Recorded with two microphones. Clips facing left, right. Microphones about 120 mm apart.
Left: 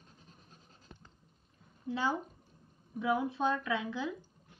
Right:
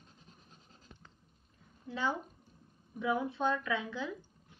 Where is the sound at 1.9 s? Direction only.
10° left (ahead or behind).